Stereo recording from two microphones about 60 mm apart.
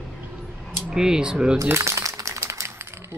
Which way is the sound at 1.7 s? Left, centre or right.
Right.